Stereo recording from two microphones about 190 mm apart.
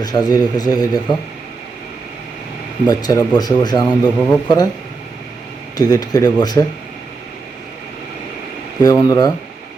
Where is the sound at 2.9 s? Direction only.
20° left (ahead or behind).